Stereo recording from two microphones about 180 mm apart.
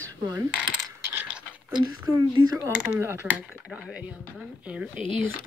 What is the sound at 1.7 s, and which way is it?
Speech, 20° right (ahead or behind).